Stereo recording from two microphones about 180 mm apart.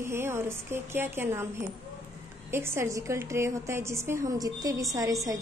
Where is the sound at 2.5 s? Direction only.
15° right (ahead or behind).